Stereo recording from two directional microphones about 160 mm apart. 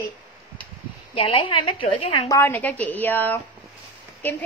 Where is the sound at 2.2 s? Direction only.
15° left (ahead or behind).